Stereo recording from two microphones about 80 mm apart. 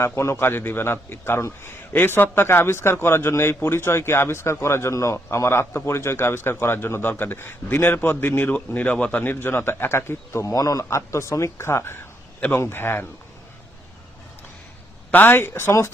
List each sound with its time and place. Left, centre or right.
0.0 s a man's voice: left; by 9.3 s centre
9.3 s a man's voice: left
10.5 s a man's voice: left
10.8 s a man's voice: left
15.1 s a man's voice: left